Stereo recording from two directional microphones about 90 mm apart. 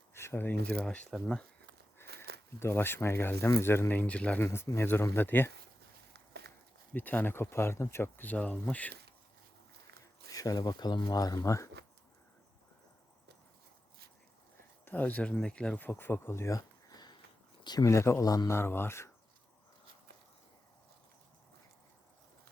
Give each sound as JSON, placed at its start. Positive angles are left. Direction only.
{"t": 0.1, "sound": "speech", "side_deg": 30}
{"t": 2.6, "sound": "speech", "side_deg": 25}
{"t": 4.4, "sound": "speech", "side_deg": 30}
{"t": 6.9, "sound": "speech", "side_deg": 20}
{"t": 10.2, "sound": "speech", "side_deg": 40}
{"t": 14.8, "sound": "speech", "side_deg": 20}
{"t": 17.8, "sound": "speech", "side_deg": 30}